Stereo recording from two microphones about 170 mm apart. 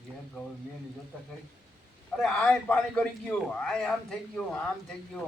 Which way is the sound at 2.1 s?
5° left (ahead or behind).